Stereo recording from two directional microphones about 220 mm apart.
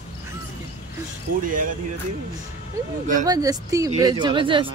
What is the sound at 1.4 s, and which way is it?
Speech, 40° right (ahead or behind).